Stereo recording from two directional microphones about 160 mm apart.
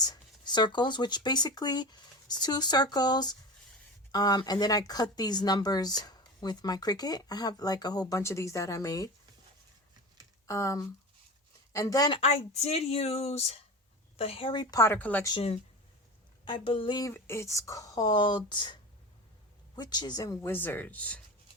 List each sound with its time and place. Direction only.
0.0 s speech: 25° left (ahead or behind)
10.4 s speech: 20° left (ahead or behind)
12.2 s speech: 45° left (ahead or behind); by 14.9 s 20° left (ahead or behind)
14.9 s a woman's voice: 10° left (ahead or behind)
16.5 s speech: 30° left (ahead or behind)
17.1 s a woman's voice: 15° left (ahead or behind)